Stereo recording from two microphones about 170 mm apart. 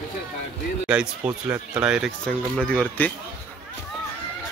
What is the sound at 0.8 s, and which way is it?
Speech, 10° right (ahead or behind).